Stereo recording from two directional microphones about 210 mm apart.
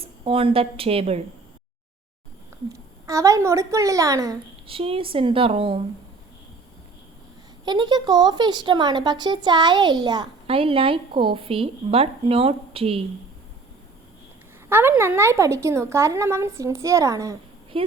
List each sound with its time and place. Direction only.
0.0 s speech: 25° right (ahead or behind)
3.1 s a woman's voice: 15° right (ahead or behind)
7.6 s speech: 20° right (ahead or behind)
14.7 s a woman's voice: 10° right (ahead or behind)